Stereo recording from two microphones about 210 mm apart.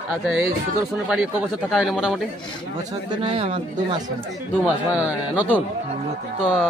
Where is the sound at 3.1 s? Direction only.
25° right (ahead or behind).